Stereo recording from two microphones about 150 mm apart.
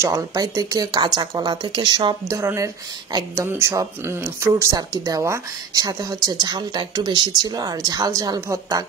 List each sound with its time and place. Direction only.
0.0 s speech: 20° right (ahead or behind)
2.3 s speech: 20° right (ahead or behind)